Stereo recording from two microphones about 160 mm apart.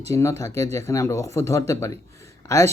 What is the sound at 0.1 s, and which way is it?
A man's voice, 20° left (ahead or behind).